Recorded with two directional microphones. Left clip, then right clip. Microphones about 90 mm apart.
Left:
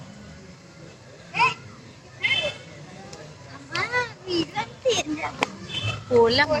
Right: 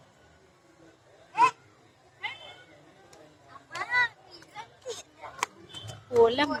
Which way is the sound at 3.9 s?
20° right (ahead or behind).